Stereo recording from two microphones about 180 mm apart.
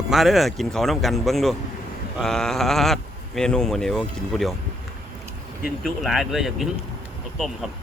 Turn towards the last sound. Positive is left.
turn(degrees=0)  # may be behind; listen again after turning